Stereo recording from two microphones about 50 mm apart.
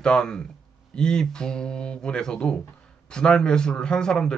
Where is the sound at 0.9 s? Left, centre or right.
Centre.